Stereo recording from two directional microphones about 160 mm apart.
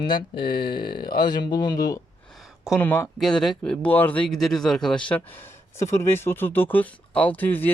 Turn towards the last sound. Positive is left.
turn(degrees=10)  # may be behind; listen again after turning